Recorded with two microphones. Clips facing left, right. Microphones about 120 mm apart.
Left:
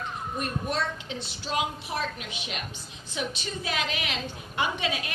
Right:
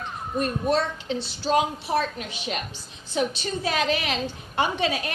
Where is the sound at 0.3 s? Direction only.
35° right (ahead or behind).